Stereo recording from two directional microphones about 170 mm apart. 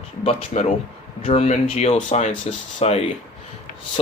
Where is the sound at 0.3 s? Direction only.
40° left (ahead or behind).